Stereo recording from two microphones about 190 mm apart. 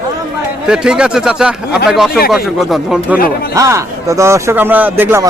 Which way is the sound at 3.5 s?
15° right (ahead or behind).